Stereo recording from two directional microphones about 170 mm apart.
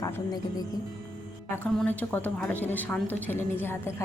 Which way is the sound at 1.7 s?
5° left (ahead or behind).